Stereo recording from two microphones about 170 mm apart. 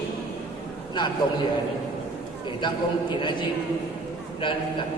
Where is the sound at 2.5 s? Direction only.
25° left (ahead or behind).